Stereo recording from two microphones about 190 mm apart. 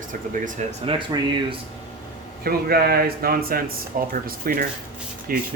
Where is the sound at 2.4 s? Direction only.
55° right (ahead or behind).